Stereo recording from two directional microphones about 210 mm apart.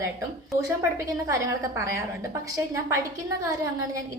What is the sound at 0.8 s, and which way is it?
A woman's voice, 15° right (ahead or behind).